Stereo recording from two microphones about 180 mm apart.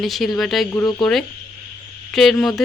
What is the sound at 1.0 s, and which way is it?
Speech, centre (ahead or behind).